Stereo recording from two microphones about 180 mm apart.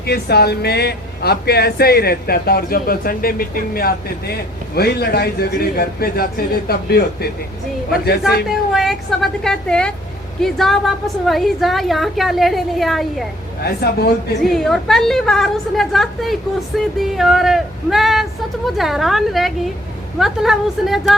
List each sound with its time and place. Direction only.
0.0 s speech: 60° left (ahead or behind)
8.4 s a woman's voice: centre (ahead or behind)
13.6 s speech: 60° left (ahead or behind)
14.4 s a woman's voice: centre (ahead or behind)